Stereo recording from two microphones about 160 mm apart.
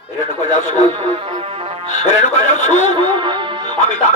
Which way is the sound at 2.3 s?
45° left (ahead or behind).